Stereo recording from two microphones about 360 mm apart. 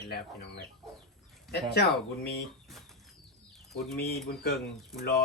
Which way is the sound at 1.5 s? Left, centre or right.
Centre.